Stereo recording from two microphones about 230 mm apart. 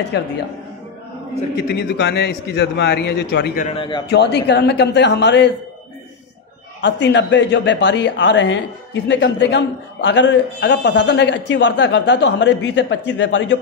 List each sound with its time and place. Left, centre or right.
0.1 s speech: left
1.8 s speech: left
3.7 s a man's voice: left
4.1 s speech: left
6.8 s speech: left